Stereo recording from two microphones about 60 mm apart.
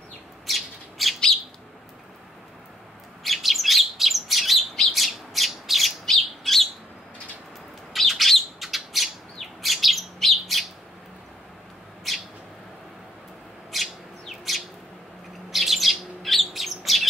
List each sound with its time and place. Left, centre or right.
0.5 s bird: centre
3.3 s bird: centre
7.9 s bird: centre
12.1 s bird: centre
13.7 s bird: centre